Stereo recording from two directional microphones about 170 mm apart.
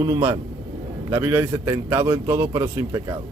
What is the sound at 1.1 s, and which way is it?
A man's voice, 15° right (ahead or behind).